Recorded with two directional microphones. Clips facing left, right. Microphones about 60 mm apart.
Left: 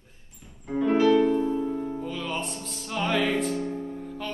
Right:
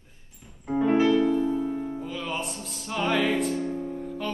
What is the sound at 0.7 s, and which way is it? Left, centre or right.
Music, centre.